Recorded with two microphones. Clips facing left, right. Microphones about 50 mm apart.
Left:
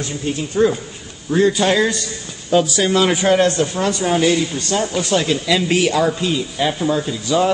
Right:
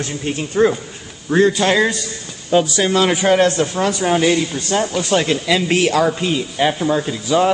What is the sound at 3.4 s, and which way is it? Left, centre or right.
Speech, right.